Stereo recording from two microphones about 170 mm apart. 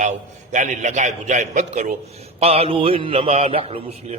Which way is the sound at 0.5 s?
45° right (ahead or behind).